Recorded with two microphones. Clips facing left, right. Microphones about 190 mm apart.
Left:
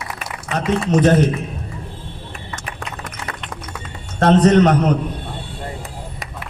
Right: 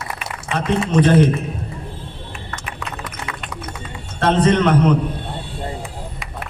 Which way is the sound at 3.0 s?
45° left (ahead or behind).